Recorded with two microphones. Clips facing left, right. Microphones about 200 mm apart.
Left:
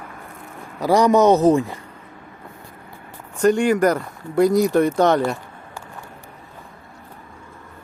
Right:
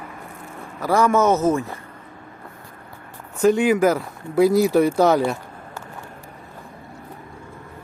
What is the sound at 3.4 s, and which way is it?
Speech, 5° right (ahead or behind).